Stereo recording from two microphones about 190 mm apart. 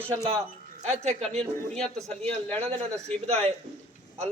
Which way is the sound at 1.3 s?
5° left (ahead or behind).